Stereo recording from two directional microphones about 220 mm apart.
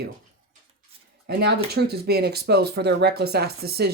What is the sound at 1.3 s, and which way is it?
Speech, 50° right (ahead or behind).